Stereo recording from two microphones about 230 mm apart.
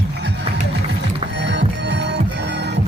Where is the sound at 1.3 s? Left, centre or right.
Right.